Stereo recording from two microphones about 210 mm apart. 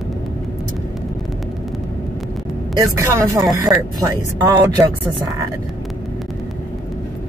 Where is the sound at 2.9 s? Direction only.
15° right (ahead or behind).